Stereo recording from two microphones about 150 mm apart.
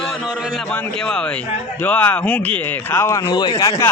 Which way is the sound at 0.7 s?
5° left (ahead or behind).